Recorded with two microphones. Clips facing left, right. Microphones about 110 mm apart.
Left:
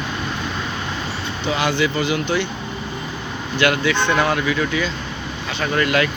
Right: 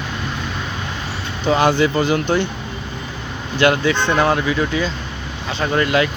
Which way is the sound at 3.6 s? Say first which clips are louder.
Right 3 dB; 35° right (ahead or behind).